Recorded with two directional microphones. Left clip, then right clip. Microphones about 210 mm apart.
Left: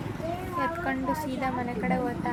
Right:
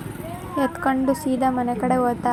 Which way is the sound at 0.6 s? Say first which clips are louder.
Right 9 dB; 25° right (ahead or behind).